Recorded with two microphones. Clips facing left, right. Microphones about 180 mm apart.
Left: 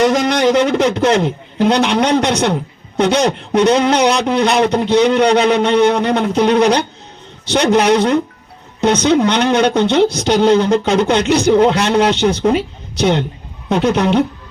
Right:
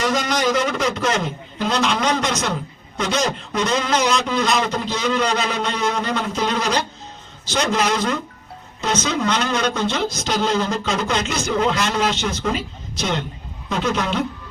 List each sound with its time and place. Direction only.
0.0 s speech: 65° left (ahead or behind)